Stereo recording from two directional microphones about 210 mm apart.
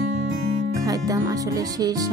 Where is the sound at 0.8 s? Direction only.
15° right (ahead or behind).